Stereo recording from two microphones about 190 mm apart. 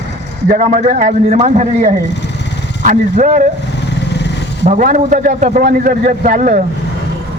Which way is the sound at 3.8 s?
65° left (ahead or behind).